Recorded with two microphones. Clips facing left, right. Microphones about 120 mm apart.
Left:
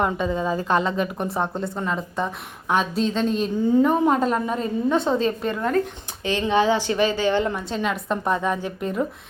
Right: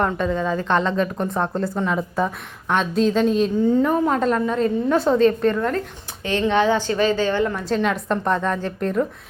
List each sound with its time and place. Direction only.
0.0 s speech: 5° left (ahead or behind)
4.9 s a woman's voice: centre (ahead or behind); by 7.6 s 20° left (ahead or behind)
7.6 s a woman's voice: centre (ahead or behind)